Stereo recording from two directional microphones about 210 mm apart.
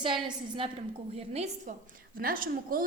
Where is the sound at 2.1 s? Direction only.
40° right (ahead or behind).